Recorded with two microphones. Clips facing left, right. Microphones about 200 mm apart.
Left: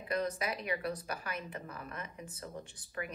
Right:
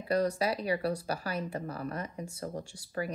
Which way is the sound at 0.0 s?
35° right (ahead or behind).